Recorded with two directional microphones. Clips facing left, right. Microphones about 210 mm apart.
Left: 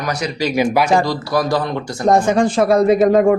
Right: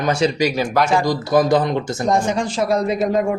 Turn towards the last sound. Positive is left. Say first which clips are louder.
# left 7 dB
turn(degrees=60)  # may be behind; listen again after turning